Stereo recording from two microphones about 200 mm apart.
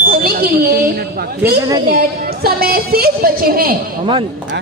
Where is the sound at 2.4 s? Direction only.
50° right (ahead or behind).